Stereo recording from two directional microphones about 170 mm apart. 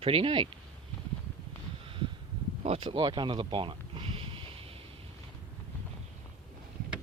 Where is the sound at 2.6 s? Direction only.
35° right (ahead or behind).